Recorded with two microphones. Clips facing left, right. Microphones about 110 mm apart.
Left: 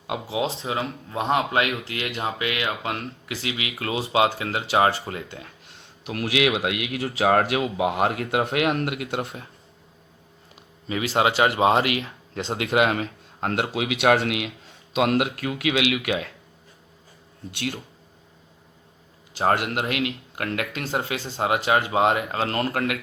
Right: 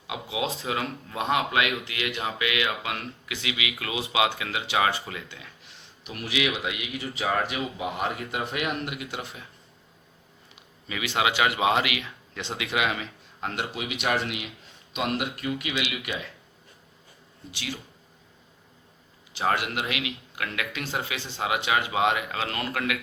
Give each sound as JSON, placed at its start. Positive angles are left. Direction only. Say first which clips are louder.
{"t": 0.1, "sound": "speech", "louder": "left 4 dB", "side_deg": 35}
{"t": 6.1, "sound": "speech", "louder": "left 6 dB", "side_deg": 80}
{"t": 10.8, "sound": "speech", "louder": "left 5 dB", "side_deg": 35}
{"t": 13.7, "sound": "speech", "louder": "left 8 dB", "side_deg": 80}
{"t": 17.5, "sound": "speech", "louder": "left 6 dB", "side_deg": 60}
{"t": 19.3, "sound": "speech", "louder": "left 4 dB", "side_deg": 45}